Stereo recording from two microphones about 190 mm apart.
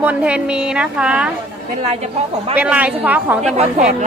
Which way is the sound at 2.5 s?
5° right (ahead or behind).